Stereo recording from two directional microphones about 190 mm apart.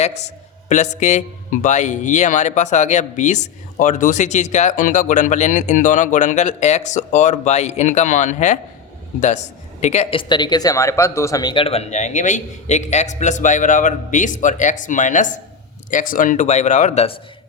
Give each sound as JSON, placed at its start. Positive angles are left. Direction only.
{"t": 0.7, "sound": "speech", "side_deg": 40}
{"t": 9.8, "sound": "speech", "side_deg": 35}